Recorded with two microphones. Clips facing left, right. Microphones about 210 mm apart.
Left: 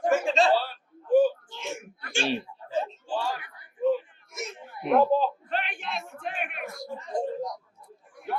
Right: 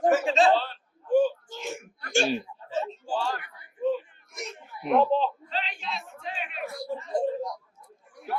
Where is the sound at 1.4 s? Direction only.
45° right (ahead or behind).